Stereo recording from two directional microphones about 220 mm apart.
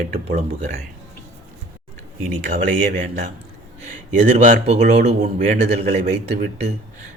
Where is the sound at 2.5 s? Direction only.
40° right (ahead or behind).